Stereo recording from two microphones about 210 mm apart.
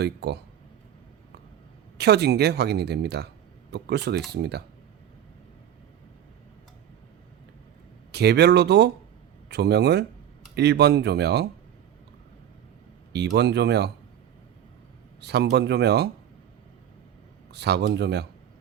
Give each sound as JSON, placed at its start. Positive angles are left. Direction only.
{"t": 0.0, "sound": "speech", "side_deg": -50}
{"t": 2.0, "sound": "speech", "side_deg": -50}
{"t": 8.1, "sound": "speech", "side_deg": -50}
{"t": 13.1, "sound": "speech", "side_deg": -55}
{"t": 15.2, "sound": "speech", "side_deg": -50}
{"t": 17.5, "sound": "speech", "side_deg": -50}